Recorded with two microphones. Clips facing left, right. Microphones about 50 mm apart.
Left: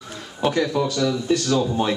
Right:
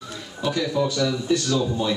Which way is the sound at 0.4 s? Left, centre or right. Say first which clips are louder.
Left 2 dB; left.